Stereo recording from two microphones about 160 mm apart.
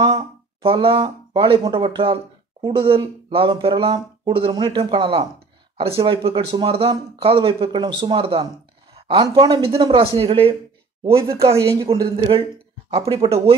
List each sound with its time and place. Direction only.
0.0 s speech: 30° right (ahead or behind)
11.1 s speech: 20° right (ahead or behind)
12.9 s speech: 35° right (ahead or behind)